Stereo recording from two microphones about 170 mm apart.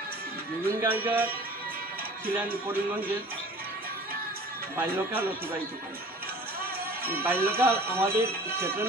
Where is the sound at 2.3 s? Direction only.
10° right (ahead or behind).